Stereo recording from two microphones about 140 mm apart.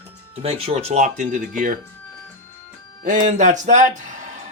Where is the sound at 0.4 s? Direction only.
45° right (ahead or behind); by 1.8 s 75° right (ahead or behind).